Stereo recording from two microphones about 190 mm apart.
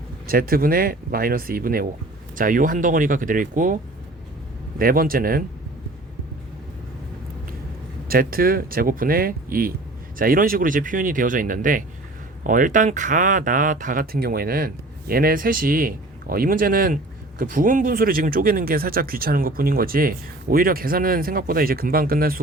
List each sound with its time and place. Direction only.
0.3 s speech: 50° right (ahead or behind)
4.8 s speech: 50° right (ahead or behind)
8.0 s speech: 50° right (ahead or behind)